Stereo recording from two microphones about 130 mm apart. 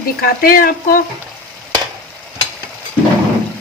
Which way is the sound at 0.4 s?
90° left.